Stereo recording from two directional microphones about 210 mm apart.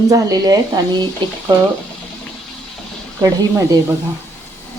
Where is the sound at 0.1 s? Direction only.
15° right (ahead or behind).